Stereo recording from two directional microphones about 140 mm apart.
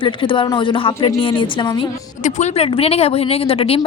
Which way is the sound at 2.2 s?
60° left (ahead or behind).